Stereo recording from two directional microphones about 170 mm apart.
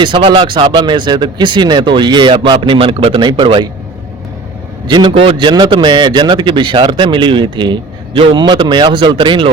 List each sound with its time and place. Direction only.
0.0 s a man's voice: 30° right (ahead or behind)
4.9 s a man's voice: 25° right (ahead or behind)